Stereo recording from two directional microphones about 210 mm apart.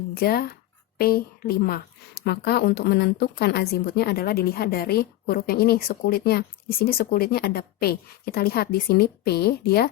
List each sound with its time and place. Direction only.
0.2 s a woman's voice: 45° left (ahead or behind)